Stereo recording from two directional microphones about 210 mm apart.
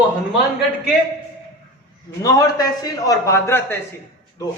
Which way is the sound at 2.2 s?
15° left (ahead or behind).